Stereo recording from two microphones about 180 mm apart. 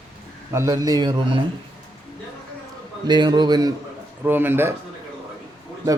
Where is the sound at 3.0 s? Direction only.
25° right (ahead or behind).